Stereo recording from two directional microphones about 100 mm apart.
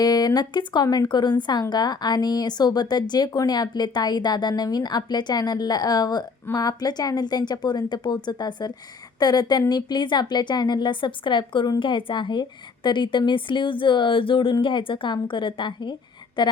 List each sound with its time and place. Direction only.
0.0 s speech: 40° left (ahead or behind)